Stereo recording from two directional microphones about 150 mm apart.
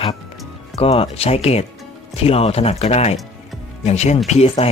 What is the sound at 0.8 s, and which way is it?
Speech, 40° left (ahead or behind).